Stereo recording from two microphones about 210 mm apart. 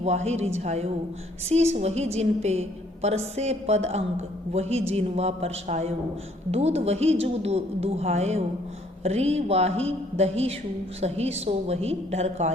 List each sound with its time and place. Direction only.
0.0 s a woman's voice: 30° right (ahead or behind)